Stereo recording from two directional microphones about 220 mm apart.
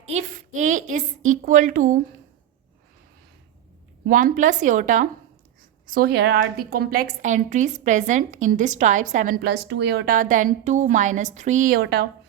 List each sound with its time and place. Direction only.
0.0 s a woman's voice: 30° right (ahead or behind)
4.0 s a woman's voice: 40° right (ahead or behind)